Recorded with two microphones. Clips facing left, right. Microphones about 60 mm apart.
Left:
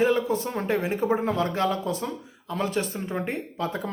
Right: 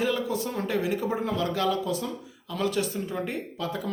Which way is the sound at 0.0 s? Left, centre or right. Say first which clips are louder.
Left 4 dB; left.